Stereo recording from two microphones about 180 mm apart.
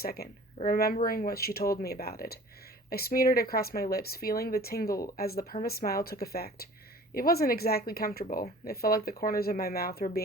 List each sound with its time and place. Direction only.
0.0 s speech: 60° left (ahead or behind)